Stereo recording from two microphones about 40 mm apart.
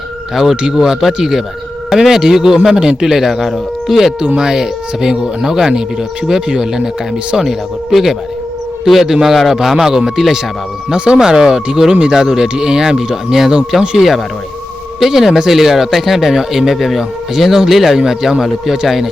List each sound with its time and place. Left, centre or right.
0.5 s speech: centre
0.8 s speech: centre
7.4 s speech: centre
10.9 s speech: right
11.9 s speech: right
15.0 s speech: centre